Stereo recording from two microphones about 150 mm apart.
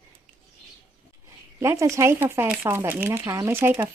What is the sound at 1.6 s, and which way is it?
Speech, 20° right (ahead or behind).